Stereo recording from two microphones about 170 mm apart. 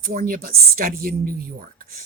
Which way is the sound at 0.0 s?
55° right (ahead or behind).